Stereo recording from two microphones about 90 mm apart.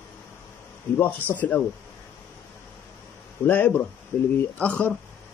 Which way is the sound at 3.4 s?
20° left (ahead or behind).